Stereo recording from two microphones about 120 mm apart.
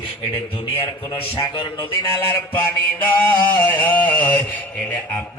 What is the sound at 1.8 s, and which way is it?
Mantra, 20° left (ahead or behind).